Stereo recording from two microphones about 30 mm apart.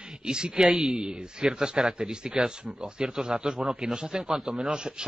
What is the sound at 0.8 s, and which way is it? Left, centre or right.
A man's voice, right.